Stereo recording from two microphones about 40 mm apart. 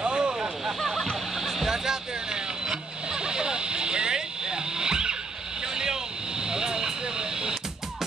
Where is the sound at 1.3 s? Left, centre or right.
Centre.